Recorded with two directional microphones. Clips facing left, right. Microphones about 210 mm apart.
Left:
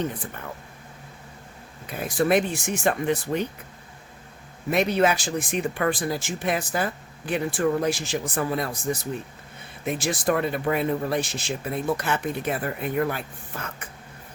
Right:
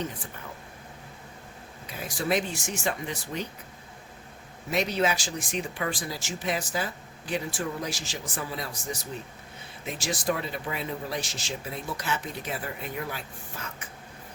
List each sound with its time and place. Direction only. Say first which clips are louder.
1.9 s speech: left 7 dB; 55° left (ahead or behind)
4.7 s speech: left 5 dB; 55° left (ahead or behind)